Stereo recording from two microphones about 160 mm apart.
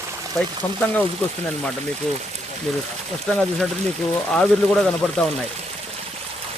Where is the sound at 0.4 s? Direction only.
Centre (ahead or behind).